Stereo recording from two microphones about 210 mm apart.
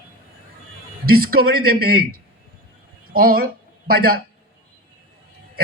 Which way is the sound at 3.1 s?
45° right (ahead or behind).